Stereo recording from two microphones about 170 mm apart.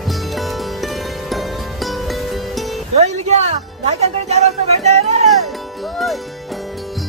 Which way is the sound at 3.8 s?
40° right (ahead or behind).